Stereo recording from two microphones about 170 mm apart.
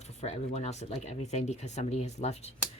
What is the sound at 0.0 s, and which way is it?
Speech, 40° left (ahead or behind).